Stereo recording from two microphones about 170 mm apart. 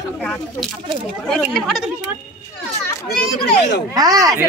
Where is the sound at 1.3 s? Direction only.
5° right (ahead or behind).